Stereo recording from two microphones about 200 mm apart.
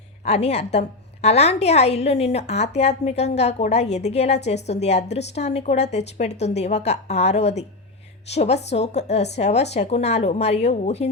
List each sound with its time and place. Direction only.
0.3 s a woman's voice: 30° left (ahead or behind)